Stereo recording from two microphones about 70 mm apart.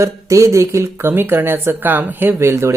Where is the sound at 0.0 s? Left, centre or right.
Right.